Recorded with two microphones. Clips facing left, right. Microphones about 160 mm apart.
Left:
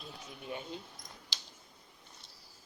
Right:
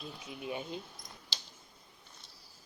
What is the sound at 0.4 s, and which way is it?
Speech, 15° right (ahead or behind).